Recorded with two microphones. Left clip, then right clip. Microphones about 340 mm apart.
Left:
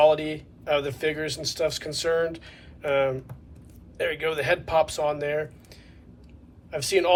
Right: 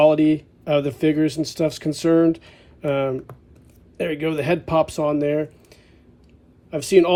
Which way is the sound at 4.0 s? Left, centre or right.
Centre.